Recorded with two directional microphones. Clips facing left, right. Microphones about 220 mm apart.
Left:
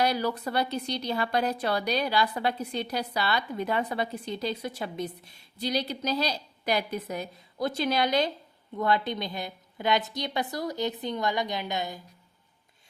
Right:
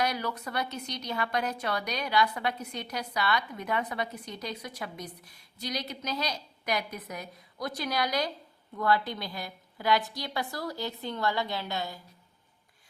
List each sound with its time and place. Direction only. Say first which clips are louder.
0.0 s a woman's voice: left 5 dB; 30° left (ahead or behind)